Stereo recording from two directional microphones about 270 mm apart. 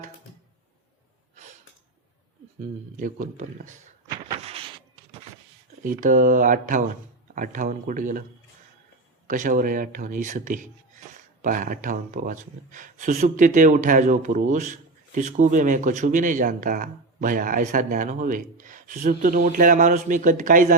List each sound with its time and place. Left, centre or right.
2.6 s speech: right
4.3 s a sound: right
5.8 s speech: right
9.2 s speech: right